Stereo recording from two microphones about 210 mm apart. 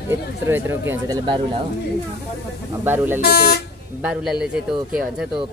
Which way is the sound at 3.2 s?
50° left (ahead or behind).